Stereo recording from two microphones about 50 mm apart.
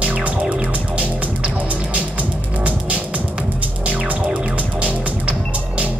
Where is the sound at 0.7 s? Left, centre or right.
Right.